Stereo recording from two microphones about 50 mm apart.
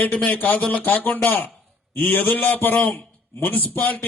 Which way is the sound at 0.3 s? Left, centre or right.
Left.